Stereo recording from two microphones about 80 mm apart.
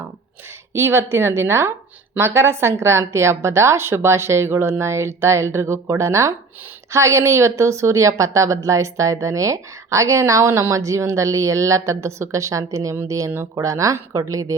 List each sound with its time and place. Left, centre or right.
0.7 s a woman's voice: right